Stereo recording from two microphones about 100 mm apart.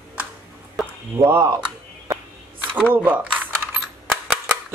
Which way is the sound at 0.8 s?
Centre (ahead or behind).